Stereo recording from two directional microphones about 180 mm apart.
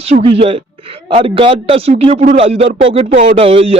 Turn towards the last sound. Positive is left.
turn(degrees=-30)  # may be behind; listen again after turning